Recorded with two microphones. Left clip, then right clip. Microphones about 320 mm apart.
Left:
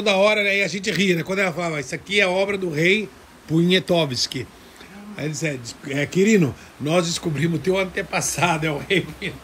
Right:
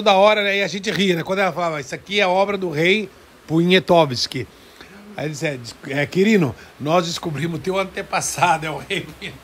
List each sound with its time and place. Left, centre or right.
0.0 s a man's voice: right